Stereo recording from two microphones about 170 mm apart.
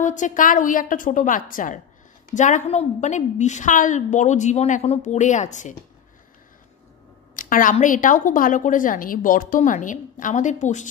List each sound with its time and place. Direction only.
0.0 s a woman's voice: 50° left (ahead or behind)
7.3 s a sound: 55° left (ahead or behind)
7.7 s a woman's voice: 50° left (ahead or behind)